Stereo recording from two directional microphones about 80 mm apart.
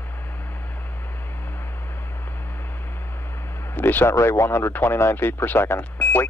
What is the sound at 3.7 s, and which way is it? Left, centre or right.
Speech, left.